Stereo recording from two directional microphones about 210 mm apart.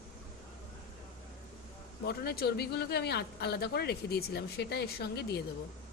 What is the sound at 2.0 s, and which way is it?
Speech, 50° left (ahead or behind).